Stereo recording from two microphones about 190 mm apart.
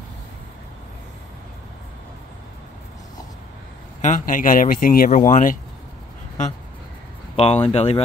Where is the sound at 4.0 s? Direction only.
40° left (ahead or behind).